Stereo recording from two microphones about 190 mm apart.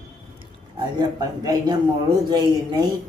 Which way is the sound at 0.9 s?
20° right (ahead or behind).